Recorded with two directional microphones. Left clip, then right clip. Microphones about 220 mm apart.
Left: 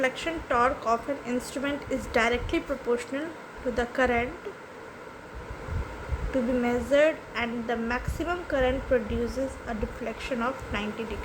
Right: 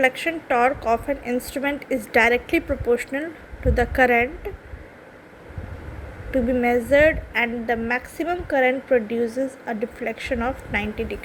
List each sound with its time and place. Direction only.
0.0 s a woman's voice: 20° right (ahead or behind)
6.3 s a woman's voice: 20° right (ahead or behind)